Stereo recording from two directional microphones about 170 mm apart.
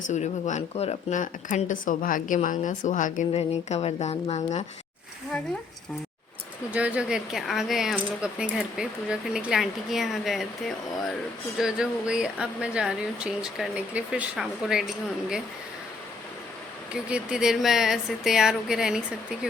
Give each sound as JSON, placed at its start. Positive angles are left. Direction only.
{"t": 0.1, "sound": "speech", "side_deg": 45}
{"t": 6.7, "sound": "speech", "side_deg": -5}
{"t": 11.5, "sound": "speech", "side_deg": -5}
{"t": 16.9, "sound": "speech", "side_deg": -5}